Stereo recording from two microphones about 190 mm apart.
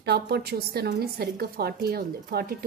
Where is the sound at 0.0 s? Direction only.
55° right (ahead or behind).